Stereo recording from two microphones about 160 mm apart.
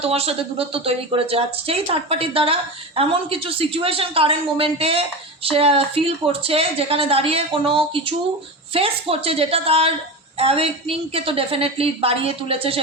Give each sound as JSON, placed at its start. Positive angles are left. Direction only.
{"t": 0.0, "sound": "speech", "side_deg": -40}